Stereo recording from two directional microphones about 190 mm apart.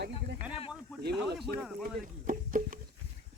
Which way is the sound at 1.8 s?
45° right (ahead or behind).